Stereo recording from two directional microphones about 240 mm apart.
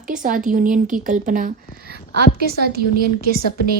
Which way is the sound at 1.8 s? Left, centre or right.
Right.